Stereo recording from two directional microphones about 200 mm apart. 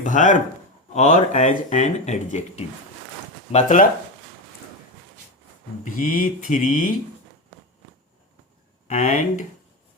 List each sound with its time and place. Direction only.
0.0 s speech: 40° left (ahead or behind)
5.8 s speech: 40° left (ahead or behind)
8.9 s speech: 40° left (ahead or behind)